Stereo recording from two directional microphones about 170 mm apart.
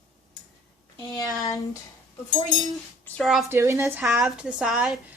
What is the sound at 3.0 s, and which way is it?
Speech, centre (ahead or behind).